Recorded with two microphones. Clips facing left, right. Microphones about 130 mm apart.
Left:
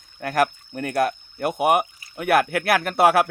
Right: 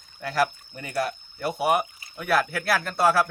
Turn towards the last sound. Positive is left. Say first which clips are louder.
# left 4 dB
turn(degrees=65)  # may be behind; listen again after turning